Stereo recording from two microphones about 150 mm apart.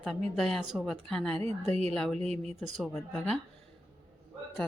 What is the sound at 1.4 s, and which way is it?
Speech, 45° right (ahead or behind).